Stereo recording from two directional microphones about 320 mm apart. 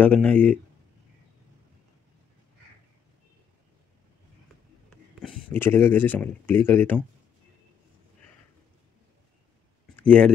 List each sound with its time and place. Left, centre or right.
0.0 s speech: centre
5.6 s speech: centre
9.9 s speech: centre